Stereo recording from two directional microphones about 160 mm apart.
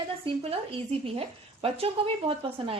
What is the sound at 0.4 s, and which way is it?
Speech, 35° right (ahead or behind).